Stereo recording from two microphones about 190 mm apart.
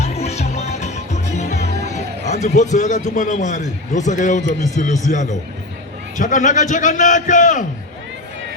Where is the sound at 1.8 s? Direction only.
40° left (ahead or behind).